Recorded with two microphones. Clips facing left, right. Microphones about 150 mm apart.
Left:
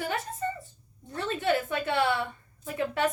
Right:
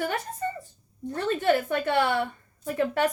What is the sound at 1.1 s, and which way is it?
A woman's voice, 45° right (ahead or behind).